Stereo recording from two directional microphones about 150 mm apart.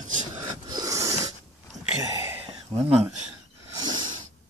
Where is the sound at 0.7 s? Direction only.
25° right (ahead or behind).